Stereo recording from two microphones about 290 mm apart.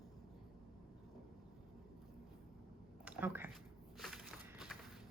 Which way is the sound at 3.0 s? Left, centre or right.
Centre.